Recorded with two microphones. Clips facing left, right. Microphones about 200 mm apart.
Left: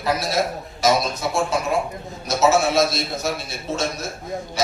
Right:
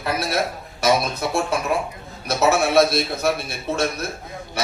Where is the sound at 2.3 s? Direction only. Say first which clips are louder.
Left 1 dB; 60° right (ahead or behind).